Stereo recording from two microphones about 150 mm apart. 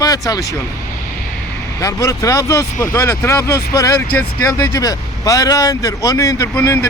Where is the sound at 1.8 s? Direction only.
20° left (ahead or behind).